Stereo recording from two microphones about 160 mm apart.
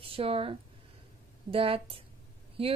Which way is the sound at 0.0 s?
35° right (ahead or behind).